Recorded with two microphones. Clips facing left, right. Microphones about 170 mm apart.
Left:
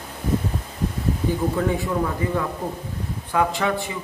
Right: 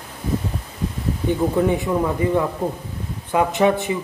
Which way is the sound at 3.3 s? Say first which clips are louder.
Right 5 dB; 20° right (ahead or behind).